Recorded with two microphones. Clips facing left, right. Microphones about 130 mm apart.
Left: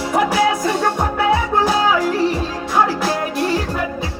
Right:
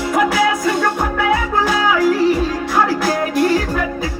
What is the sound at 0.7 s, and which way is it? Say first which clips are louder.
Music: right 1 dB; 30° left (ahead or behind).